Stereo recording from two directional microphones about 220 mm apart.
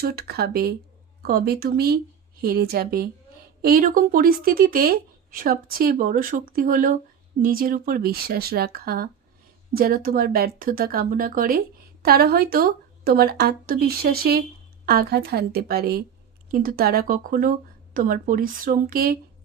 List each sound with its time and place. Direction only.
0.0 s speech: 45° right (ahead or behind)